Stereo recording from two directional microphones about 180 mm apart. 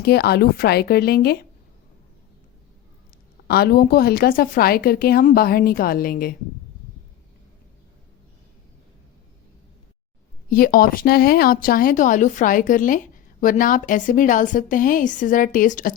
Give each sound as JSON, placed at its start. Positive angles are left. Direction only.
{"t": 0.0, "sound": "a woman's voice", "side_deg": 60}
{"t": 3.4, "sound": "a woman's voice", "side_deg": 60}
{"t": 10.5, "sound": "speech", "side_deg": 55}